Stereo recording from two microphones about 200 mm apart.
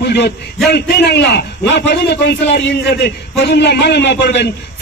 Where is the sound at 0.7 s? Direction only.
55° left (ahead or behind).